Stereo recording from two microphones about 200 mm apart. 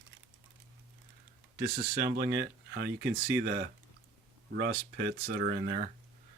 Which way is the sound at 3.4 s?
50° right (ahead or behind).